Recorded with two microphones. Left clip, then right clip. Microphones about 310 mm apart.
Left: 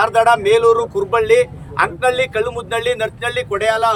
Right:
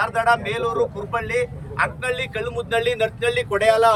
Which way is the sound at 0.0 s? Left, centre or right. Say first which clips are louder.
Left 7 dB; left.